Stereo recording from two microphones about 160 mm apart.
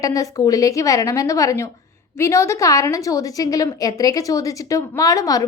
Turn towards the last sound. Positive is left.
turn(degrees=20)  # may be behind; listen again after turning